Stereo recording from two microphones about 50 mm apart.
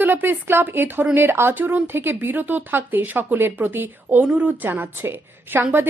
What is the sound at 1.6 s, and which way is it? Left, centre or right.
A woman's voice, right.